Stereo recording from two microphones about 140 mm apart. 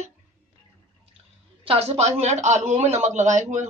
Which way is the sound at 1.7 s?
45° right (ahead or behind).